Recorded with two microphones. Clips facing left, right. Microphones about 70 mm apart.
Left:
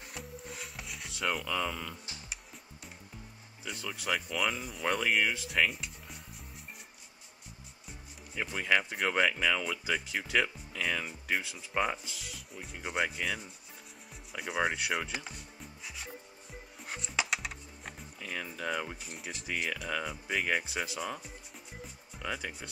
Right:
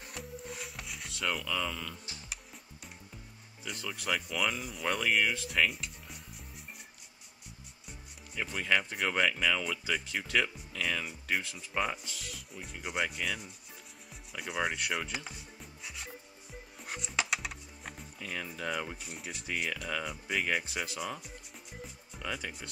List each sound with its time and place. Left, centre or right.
0.1 s music: centre
1.4 s speech: centre
3.6 s speech: centre
8.4 s speech: centre
21.8 s music: centre